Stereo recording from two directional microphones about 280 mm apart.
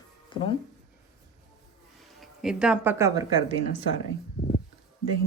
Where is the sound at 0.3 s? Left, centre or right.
Centre.